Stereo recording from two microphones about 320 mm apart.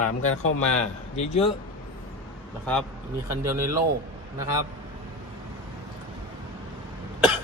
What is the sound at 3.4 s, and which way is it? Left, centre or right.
Speech, centre.